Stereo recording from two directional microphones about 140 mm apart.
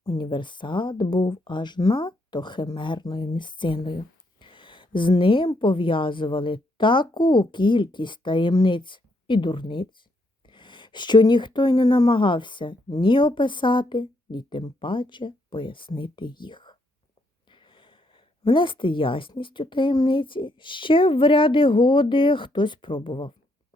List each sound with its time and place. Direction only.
0.0 s speech: 30° left (ahead or behind)